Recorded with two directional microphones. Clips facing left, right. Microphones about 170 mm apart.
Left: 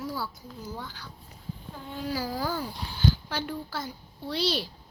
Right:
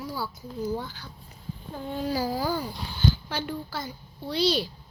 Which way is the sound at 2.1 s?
20° right (ahead or behind).